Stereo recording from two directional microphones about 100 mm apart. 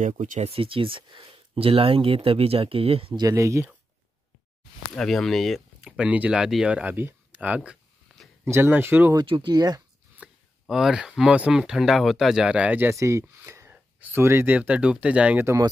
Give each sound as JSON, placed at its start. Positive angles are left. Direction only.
{"t": 0.1, "sound": "speech", "side_deg": -80}
{"t": 3.2, "sound": "speech", "side_deg": -30}
{"t": 4.9, "sound": "speech", "side_deg": 5}
{"t": 9.1, "sound": "speech", "side_deg": -55}
{"t": 10.1, "sound": "speech", "side_deg": -10}
{"t": 12.9, "sound": "speech", "side_deg": -30}
{"t": 13.5, "sound": "sneeze", "side_deg": -30}
{"t": 13.9, "sound": "speech", "side_deg": -20}
{"t": 15.4, "sound": "speech", "side_deg": -35}